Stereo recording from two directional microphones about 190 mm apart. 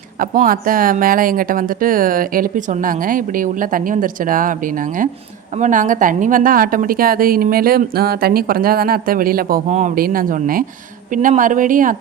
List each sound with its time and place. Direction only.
0.2 s speech: 45° right (ahead or behind)
9.6 s a man's voice: 35° right (ahead or behind)
9.9 s speech: 50° right (ahead or behind)